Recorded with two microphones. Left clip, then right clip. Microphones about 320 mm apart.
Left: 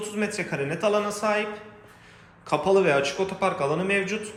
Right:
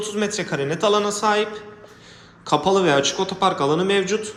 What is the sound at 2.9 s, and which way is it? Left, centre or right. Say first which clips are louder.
A man's voice: right 4 dB; centre.